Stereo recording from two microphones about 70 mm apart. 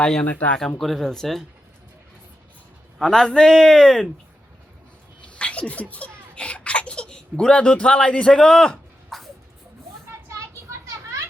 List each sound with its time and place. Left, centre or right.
0.0 s a man's voice: centre
0.3 s speech: left
0.8 s speech: centre
3.0 s a man's voice: centre
5.4 s speech: centre
9.0 s a sound: centre